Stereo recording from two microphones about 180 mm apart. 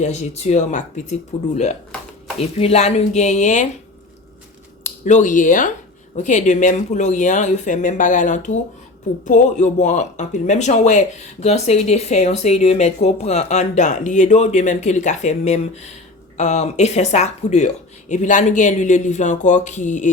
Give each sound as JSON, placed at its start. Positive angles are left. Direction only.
{"t": 0.0, "sound": "speech", "side_deg": 40}
{"t": 5.0, "sound": "speech", "side_deg": 45}